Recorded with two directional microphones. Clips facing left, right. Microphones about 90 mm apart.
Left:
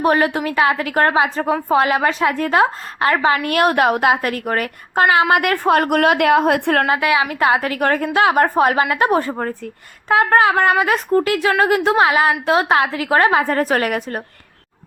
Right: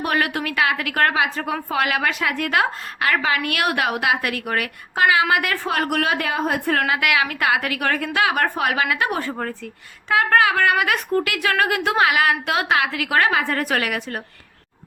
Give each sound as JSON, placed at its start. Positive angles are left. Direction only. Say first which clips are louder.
{"t": 0.0, "sound": "a woman's voice", "louder": "left 6 dB", "side_deg": 30}
{"t": 6.7, "sound": "a woman's voice", "louder": "left 4 dB", "side_deg": 35}
{"t": 7.1, "sound": "a woman's voice", "louder": "left 4 dB", "side_deg": 25}